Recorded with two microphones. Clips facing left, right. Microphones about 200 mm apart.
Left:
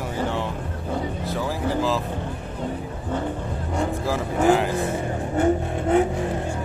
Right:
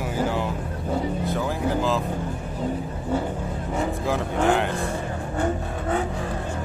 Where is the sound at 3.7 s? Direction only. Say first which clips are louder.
Left 1 dB; centre (ahead or behind).